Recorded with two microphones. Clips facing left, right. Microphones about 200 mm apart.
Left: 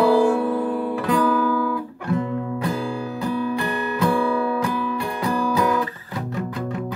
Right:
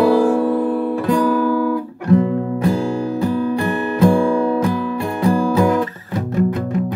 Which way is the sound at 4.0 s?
45° right (ahead or behind).